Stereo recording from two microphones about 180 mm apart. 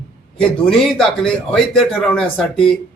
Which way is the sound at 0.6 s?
5° left (ahead or behind).